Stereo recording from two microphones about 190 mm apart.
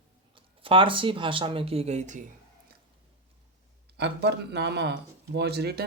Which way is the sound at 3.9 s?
60° right (ahead or behind).